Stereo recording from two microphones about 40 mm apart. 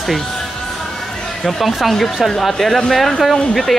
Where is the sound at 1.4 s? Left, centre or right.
Centre.